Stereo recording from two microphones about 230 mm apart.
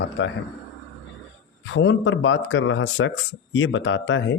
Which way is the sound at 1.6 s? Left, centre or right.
Left.